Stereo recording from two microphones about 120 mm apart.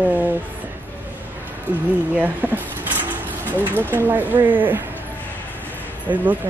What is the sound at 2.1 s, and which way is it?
Dishes, 15° right (ahead or behind).